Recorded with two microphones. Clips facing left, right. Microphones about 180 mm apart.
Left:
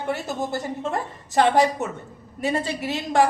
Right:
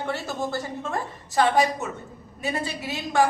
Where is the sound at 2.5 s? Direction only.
30° left (ahead or behind).